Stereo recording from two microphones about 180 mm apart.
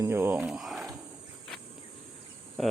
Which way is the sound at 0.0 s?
15° right (ahead or behind).